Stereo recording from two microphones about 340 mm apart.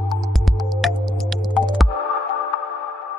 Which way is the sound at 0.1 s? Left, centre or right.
Centre.